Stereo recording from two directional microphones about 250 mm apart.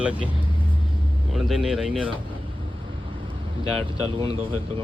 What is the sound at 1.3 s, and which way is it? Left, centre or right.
Speech, centre.